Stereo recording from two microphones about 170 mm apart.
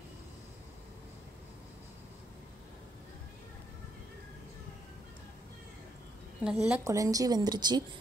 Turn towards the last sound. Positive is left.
turn(degrees=-25)  # may be behind; listen again after turning